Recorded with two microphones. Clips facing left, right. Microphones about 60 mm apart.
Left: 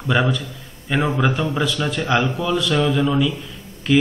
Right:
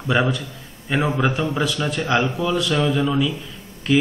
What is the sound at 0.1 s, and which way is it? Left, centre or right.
Speech, centre.